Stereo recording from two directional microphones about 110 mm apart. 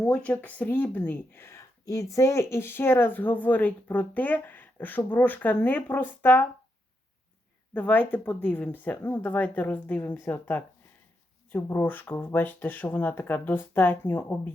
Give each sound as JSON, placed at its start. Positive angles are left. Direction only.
{"t": 0.1, "sound": "speech", "side_deg": 10}
{"t": 7.7, "sound": "speech", "side_deg": 15}